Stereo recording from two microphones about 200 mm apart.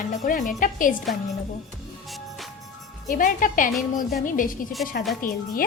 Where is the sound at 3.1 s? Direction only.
45° left (ahead or behind).